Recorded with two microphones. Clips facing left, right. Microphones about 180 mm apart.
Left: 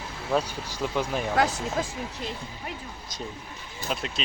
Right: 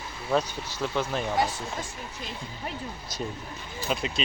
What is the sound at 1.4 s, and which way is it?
Speech, 85° left.